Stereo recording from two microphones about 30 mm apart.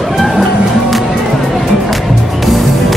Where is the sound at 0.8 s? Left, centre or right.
Centre.